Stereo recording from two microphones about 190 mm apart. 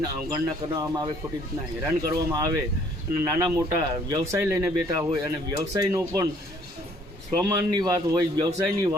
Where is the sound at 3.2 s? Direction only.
15° right (ahead or behind).